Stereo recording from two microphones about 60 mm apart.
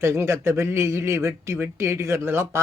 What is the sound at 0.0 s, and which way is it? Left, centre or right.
A man's voice, right.